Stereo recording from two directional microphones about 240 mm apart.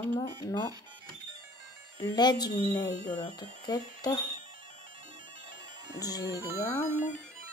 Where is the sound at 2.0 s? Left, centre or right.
Centre.